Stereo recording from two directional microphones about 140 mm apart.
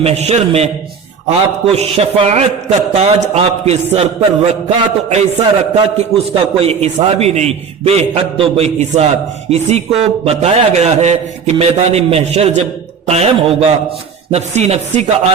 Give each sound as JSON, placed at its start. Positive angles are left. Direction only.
{"t": 0.0, "sound": "a man's voice", "side_deg": -50}
{"t": 5.7, "sound": "a man's voice", "side_deg": -45}